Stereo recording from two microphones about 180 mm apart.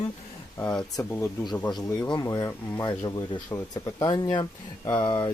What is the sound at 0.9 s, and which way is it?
Speech, 15° left (ahead or behind).